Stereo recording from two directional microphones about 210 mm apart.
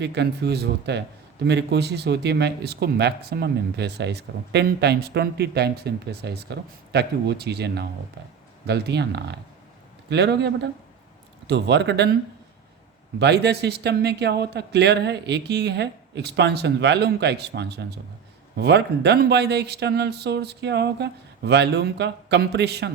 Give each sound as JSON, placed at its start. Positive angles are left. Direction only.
{"t": 0.0, "sound": "a man's voice", "side_deg": -55}
{"t": 13.1, "sound": "a man's voice", "side_deg": -55}